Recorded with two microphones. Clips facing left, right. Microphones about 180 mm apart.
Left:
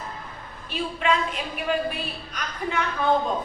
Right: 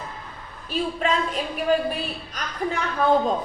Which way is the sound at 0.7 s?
40° right (ahead or behind).